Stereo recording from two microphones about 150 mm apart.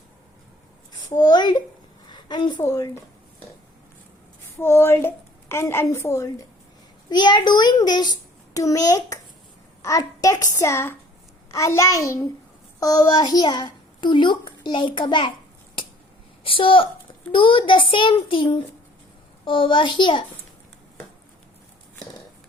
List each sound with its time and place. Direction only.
1.1 s a child's voice: 25° left (ahead or behind)
2.0 s a sound: 30° left (ahead or behind)
2.6 s a child's voice: 20° left (ahead or behind)
4.5 s a woman's voice: 15° left (ahead or behind); by 15.3 s 30° left (ahead or behind)
16.4 s a woman's voice: 35° left (ahead or behind)
19.5 s a child's voice: 35° left (ahead or behind)